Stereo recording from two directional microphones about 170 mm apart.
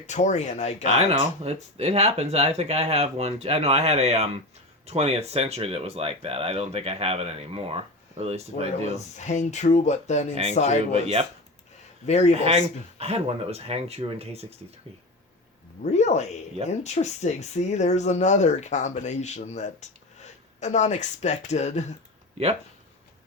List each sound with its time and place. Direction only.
0.1 s speech: 45° left (ahead or behind)
0.9 s speech: 40° right (ahead or behind)
9.1 s speech: 45° left (ahead or behind)
10.9 s speech: 35° right (ahead or behind)
12.0 s speech: 40° left (ahead or behind)
12.3 s speech: 35° right (ahead or behind)
15.8 s speech: 40° left (ahead or behind)